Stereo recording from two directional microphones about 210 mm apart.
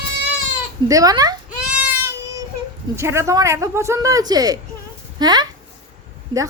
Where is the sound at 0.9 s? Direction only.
15° right (ahead or behind).